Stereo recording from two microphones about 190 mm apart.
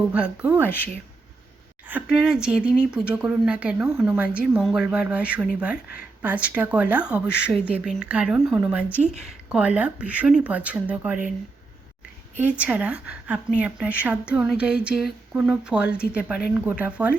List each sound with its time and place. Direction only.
0.1 s a woman's voice: 5° right (ahead or behind)
1.9 s speech: 5° right (ahead or behind)
5.7 s speech: 50° left (ahead or behind)
6.2 s a woman's voice: 5° right (ahead or behind)
12.4 s a woman's voice: 5° right (ahead or behind)